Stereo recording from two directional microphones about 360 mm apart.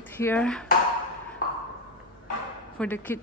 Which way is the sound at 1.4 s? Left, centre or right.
Left.